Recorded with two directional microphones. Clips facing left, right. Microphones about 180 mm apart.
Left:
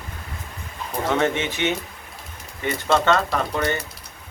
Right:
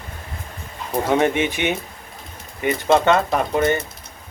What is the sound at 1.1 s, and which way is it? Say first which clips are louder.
Speech: right 3 dB; 15° right (ahead or behind).